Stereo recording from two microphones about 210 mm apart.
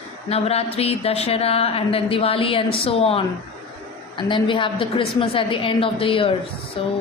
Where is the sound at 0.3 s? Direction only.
30° left (ahead or behind).